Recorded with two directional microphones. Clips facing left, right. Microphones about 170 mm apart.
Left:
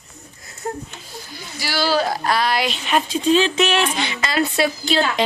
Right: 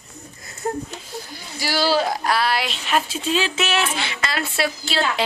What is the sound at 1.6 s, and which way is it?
Speech, 40° right (ahead or behind).